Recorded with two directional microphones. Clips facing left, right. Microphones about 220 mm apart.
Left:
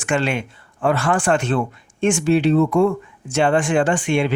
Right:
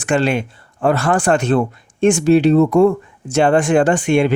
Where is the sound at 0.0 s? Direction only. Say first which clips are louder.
Right 4 dB; 35° right (ahead or behind).